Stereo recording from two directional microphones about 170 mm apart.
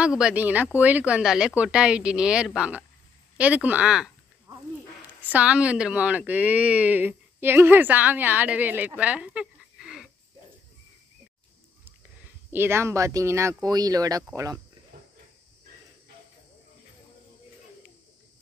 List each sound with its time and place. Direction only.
0.2 s speech: 10° right (ahead or behind)
5.2 s speech: 10° right (ahead or behind)
12.5 s speech: 15° right (ahead or behind)